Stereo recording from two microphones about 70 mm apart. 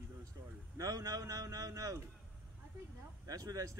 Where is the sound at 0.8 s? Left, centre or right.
Right.